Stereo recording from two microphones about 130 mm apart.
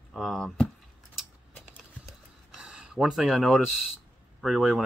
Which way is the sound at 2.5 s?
5° right (ahead or behind).